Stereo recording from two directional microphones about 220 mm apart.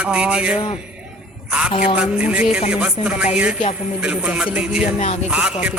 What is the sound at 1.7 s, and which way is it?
Speech, 25° left (ahead or behind).